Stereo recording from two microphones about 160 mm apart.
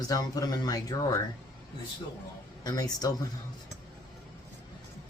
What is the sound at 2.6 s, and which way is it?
Speech, 25° left (ahead or behind).